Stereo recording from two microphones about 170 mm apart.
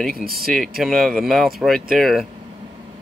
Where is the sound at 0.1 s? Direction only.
60° right (ahead or behind).